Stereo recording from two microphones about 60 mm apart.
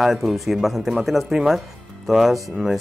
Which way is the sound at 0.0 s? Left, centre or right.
Centre.